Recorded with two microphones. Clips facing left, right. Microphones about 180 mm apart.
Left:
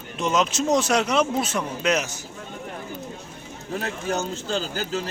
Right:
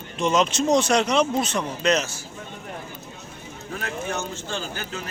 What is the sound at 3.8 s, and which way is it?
Speech, 35° left (ahead or behind).